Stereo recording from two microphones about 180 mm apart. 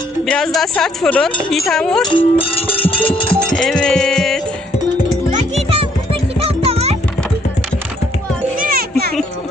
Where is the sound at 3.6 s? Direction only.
5° left (ahead or behind).